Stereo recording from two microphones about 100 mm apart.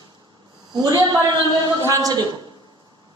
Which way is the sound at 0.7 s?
40° right (ahead or behind).